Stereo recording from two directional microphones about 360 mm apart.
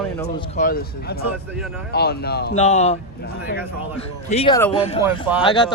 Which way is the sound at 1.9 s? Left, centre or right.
Left.